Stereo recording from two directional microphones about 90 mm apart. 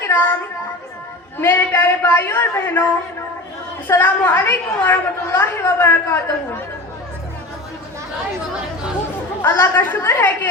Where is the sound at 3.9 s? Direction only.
20° left (ahead or behind).